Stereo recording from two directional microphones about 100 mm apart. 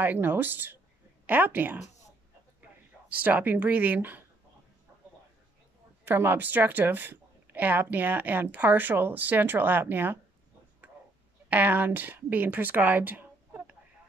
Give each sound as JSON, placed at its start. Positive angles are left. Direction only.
{"t": 0.0, "sound": "a woman's voice", "side_deg": -20}
{"t": 3.1, "sound": "speech", "side_deg": -15}
{"t": 6.0, "sound": "a woman's voice", "side_deg": -20}
{"t": 11.4, "sound": "speech", "side_deg": -15}